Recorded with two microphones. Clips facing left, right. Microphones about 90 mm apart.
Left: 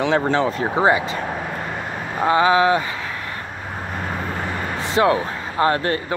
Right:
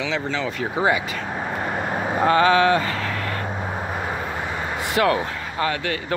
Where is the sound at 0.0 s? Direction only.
50° left (ahead or behind); by 1.0 s 30° left (ahead or behind).